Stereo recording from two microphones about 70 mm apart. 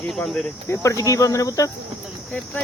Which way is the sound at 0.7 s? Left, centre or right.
Left.